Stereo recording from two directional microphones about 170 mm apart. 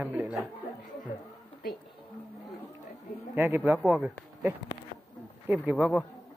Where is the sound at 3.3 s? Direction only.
15° right (ahead or behind).